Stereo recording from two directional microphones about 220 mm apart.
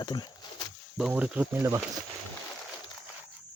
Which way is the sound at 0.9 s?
5° right (ahead or behind).